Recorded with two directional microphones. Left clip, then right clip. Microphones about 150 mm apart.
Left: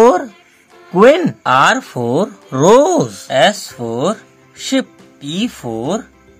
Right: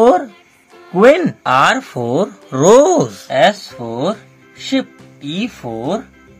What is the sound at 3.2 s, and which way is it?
Speech, 35° left (ahead or behind).